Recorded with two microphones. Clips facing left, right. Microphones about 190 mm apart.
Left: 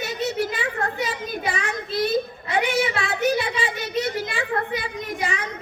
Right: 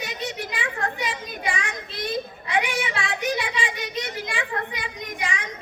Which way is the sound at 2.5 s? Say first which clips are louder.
Left 3 dB; 35° left (ahead or behind).